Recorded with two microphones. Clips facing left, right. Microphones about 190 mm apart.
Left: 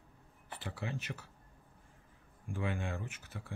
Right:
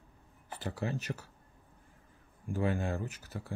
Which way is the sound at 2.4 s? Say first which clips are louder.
Right 6 dB; 40° right (ahead or behind).